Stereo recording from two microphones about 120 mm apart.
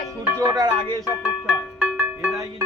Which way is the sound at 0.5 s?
35° right (ahead or behind).